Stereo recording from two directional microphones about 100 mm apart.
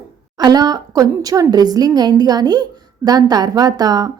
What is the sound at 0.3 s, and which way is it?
Speech, 45° right (ahead or behind).